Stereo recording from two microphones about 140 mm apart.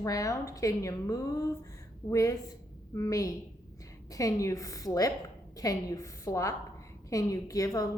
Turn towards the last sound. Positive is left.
turn(degrees=25)  # may be behind; listen again after turning